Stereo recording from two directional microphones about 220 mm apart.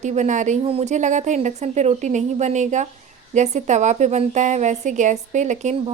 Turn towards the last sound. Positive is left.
turn(degrees=-35)  # may be behind; listen again after turning